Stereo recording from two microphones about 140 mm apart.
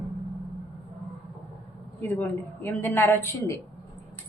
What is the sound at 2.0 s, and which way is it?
A woman's voice, 10° left (ahead or behind).